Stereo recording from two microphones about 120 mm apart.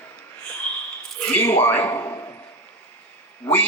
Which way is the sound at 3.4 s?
15° left (ahead or behind).